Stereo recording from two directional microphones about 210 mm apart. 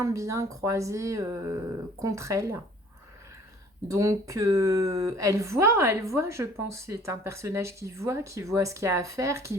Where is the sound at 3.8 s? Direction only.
15° right (ahead or behind).